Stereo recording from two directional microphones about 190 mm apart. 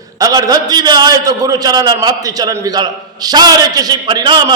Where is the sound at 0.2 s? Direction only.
20° right (ahead or behind).